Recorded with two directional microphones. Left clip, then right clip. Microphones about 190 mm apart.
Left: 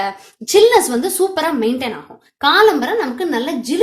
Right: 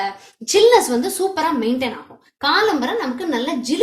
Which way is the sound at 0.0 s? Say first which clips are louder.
Left 2 dB; 35° left (ahead or behind).